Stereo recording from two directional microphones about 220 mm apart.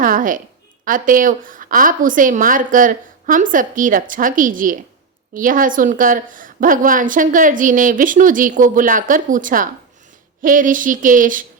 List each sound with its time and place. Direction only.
0.0 s a woman's voice: 35° right (ahead or behind)